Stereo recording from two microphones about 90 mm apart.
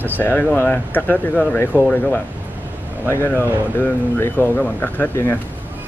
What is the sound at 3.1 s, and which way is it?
Speech, 25° left (ahead or behind).